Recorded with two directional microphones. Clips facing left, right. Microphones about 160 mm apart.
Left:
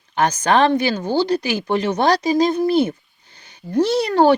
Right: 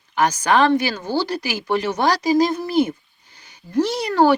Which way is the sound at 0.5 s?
25° left (ahead or behind).